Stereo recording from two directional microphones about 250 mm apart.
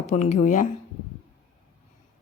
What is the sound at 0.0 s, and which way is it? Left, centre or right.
Speech, left.